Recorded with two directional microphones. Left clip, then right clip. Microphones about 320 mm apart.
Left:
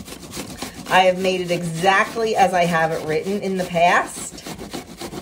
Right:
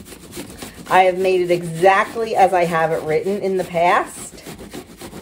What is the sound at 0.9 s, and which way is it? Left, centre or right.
Speech, centre.